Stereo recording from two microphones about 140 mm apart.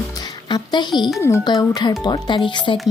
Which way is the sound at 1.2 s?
20° left (ahead or behind).